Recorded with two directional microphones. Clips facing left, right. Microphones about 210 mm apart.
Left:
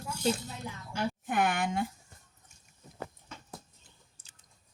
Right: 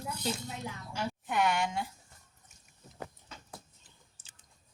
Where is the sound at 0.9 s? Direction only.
55° left (ahead or behind).